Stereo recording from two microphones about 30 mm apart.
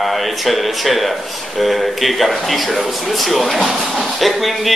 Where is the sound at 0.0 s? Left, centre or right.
Centre.